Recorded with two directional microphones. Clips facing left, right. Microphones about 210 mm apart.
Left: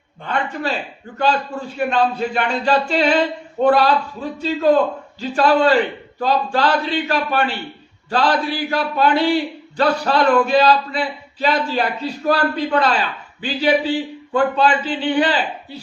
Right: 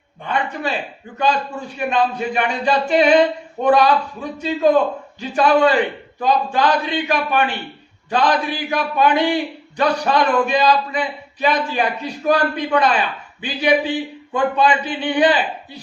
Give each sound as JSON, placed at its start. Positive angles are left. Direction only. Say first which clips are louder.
{"t": 1.2, "sound": "a man's voice", "louder": "left 1 dB", "side_deg": -15}